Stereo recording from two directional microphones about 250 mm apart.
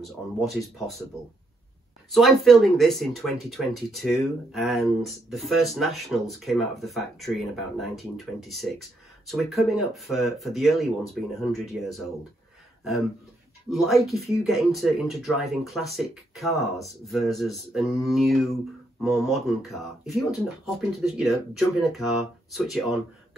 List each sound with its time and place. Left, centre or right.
0.0 s speech: centre
2.0 s speech: centre
13.7 s speech: centre